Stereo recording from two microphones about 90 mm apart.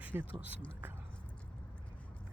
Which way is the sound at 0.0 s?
20° right (ahead or behind).